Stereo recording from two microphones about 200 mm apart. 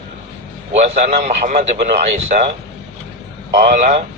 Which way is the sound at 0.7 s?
35° right (ahead or behind).